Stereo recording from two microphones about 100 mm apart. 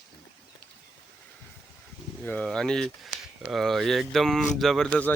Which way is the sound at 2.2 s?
15° left (ahead or behind).